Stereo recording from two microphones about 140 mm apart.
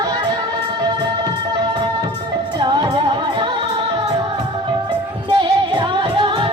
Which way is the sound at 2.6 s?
30° right (ahead or behind).